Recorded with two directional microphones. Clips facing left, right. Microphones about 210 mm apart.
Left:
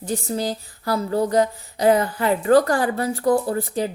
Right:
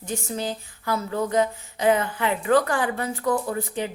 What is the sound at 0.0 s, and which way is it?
Speech, 35° left (ahead or behind).